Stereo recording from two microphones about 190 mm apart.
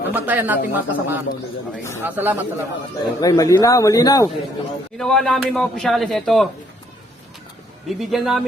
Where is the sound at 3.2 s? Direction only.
15° left (ahead or behind).